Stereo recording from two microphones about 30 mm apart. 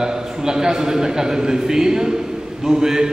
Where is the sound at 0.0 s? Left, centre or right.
Right.